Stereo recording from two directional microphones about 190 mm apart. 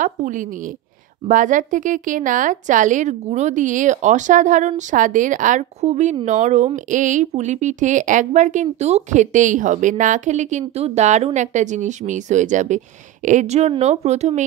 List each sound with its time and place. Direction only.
0.0 s a woman's voice: 45° right (ahead or behind)